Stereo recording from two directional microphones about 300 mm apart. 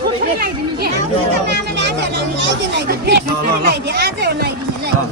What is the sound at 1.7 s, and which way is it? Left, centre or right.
Chatter, right.